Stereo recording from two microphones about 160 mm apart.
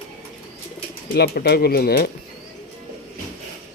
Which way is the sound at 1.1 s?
85° left.